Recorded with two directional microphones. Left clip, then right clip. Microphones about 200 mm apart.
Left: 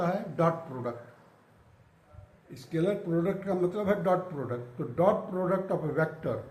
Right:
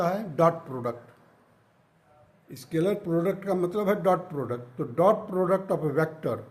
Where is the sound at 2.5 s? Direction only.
60° right (ahead or behind).